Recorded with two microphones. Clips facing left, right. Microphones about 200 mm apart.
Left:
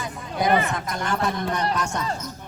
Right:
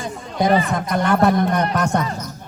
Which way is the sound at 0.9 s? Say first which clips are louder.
Right 12 dB; 60° right (ahead or behind).